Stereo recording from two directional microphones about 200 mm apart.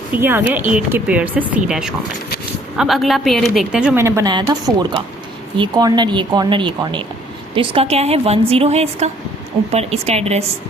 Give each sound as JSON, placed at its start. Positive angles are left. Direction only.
{"t": 0.2, "sound": "a woman's voice", "side_deg": -10}